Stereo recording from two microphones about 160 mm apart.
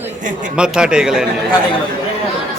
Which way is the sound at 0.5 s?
5° right (ahead or behind).